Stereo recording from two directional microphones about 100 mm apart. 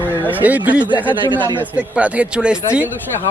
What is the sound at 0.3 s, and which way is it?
Speech, 15° right (ahead or behind).